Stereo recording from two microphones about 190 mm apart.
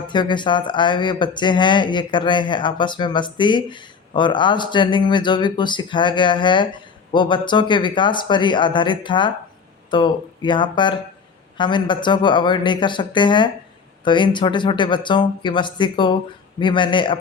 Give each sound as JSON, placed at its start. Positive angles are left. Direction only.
{"t": 0.1, "sound": "speech", "side_deg": 25}